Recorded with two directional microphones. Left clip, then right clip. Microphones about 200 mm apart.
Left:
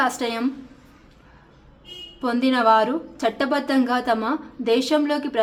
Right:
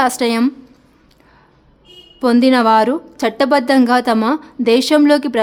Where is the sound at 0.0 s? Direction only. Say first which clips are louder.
Right 7 dB; 50° right (ahead or behind).